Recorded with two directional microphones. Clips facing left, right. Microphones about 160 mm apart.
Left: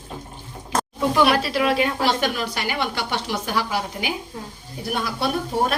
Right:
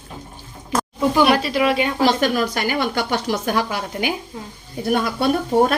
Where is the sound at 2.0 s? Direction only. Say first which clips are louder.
Right 5 dB; 45° right (ahead or behind).